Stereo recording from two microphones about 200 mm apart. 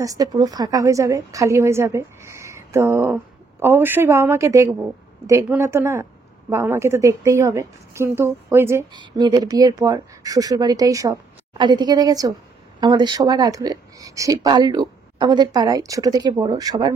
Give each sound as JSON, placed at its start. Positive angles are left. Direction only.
{"t": 0.0, "sound": "a woman's voice", "side_deg": -15}